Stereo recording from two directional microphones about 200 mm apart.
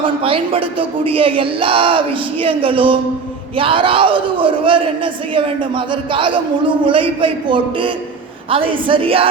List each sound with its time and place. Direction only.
0.0 s speech: 25° right (ahead or behind)